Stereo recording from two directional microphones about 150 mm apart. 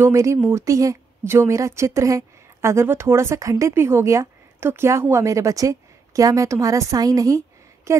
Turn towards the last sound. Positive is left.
turn(degrees=-20)  # may be behind; listen again after turning